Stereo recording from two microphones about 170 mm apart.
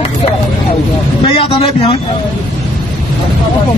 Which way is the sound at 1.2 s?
35° left (ahead or behind).